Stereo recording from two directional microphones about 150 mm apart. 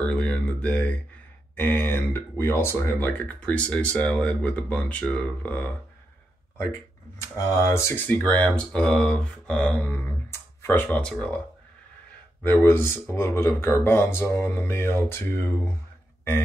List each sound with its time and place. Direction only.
0.1 s speech: 10° left (ahead or behind)
7.3 s speech: 20° left (ahead or behind)
12.4 s speech: 15° left (ahead or behind)